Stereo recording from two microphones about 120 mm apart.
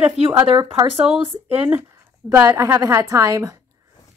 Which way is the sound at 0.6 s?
25° right (ahead or behind).